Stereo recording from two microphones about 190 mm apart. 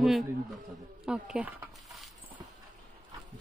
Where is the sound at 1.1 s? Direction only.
5° right (ahead or behind).